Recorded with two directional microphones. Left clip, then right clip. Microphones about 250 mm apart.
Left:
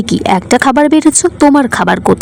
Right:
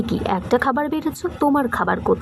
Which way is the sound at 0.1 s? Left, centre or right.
Left.